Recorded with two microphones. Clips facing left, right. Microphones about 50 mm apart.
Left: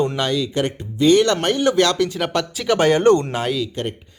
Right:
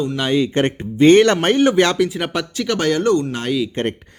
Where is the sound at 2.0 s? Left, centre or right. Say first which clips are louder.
Right 1 dB; centre.